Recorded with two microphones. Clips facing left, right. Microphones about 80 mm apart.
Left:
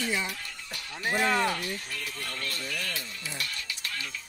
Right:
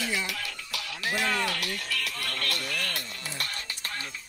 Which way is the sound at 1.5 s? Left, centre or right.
Right.